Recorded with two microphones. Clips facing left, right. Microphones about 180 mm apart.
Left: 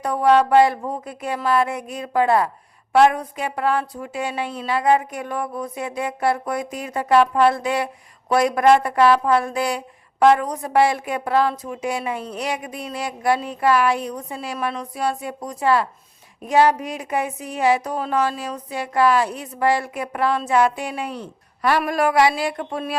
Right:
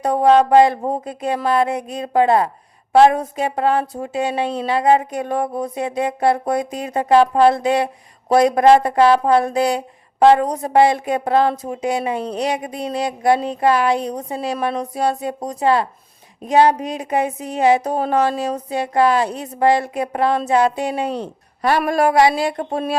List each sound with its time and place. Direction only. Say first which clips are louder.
0.0 s speech: right 3 dB; 25° right (ahead or behind)
7.5 s speech: right 5 dB; 20° right (ahead or behind)